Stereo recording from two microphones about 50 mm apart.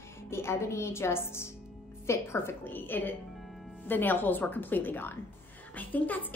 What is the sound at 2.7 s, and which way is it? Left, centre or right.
A woman's voice, left.